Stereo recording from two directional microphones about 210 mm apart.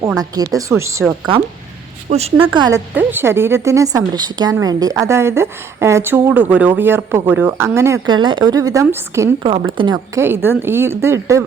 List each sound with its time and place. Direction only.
0.2 s a woman's voice: 15° right (ahead or behind)
1.0 s speech: 5° right (ahead or behind)
2.0 s a woman's voice: 30° right (ahead or behind); by 11.4 s 15° right (ahead or behind)